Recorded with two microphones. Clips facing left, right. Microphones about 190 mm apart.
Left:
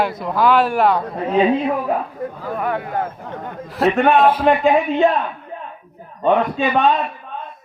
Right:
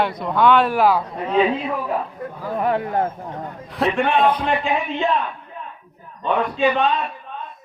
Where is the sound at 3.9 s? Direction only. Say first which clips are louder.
Left 6 dB; 50° left (ahead or behind).